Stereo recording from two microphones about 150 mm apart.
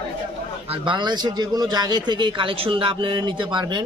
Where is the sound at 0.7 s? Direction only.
30° right (ahead or behind).